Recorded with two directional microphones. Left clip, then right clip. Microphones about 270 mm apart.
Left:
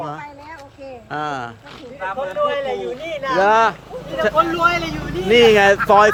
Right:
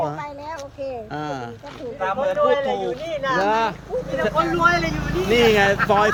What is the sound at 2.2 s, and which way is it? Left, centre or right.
A man's voice, left.